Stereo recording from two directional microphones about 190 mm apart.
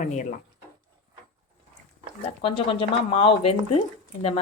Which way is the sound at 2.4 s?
30° left (ahead or behind).